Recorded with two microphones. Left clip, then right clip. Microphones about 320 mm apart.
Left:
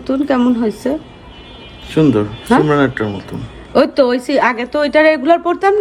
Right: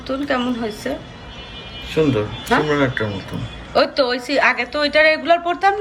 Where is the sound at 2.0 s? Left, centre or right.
Left.